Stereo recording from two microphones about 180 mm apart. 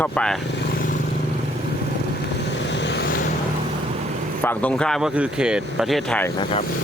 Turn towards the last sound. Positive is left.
turn(degrees=5)  # may be behind; listen again after turning